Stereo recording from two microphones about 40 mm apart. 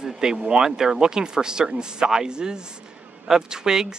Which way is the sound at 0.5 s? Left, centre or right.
Centre.